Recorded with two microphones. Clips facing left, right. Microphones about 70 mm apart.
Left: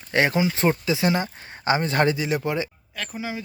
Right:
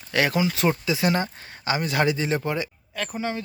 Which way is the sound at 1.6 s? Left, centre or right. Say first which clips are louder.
Left 2 dB; left.